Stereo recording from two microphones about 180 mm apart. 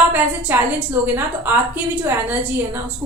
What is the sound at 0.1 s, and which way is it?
A woman's voice, 10° right (ahead or behind).